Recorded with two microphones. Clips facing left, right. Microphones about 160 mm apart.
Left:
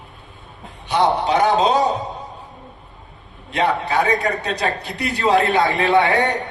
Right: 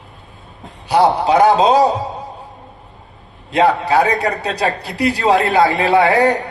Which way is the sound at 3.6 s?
35° right (ahead or behind).